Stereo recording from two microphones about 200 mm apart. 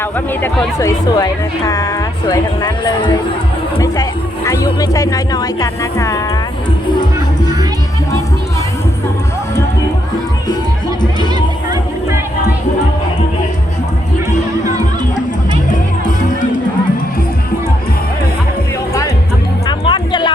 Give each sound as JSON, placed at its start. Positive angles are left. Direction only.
{"t": 0.4, "sound": "speech", "side_deg": 15}
{"t": 4.4, "sound": "speech", "side_deg": 15}
{"t": 19.6, "sound": "music", "side_deg": 25}